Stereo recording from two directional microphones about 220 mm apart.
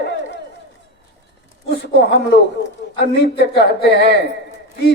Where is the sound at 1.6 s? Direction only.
50° left (ahead or behind).